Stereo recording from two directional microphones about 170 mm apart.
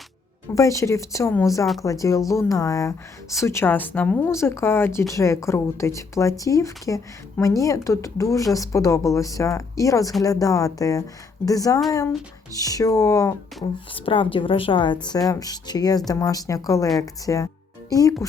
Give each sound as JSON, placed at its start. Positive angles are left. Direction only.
{"t": 0.5, "sound": "speech", "side_deg": 20}
{"t": 13.9, "sound": "a woman's voice", "side_deg": 30}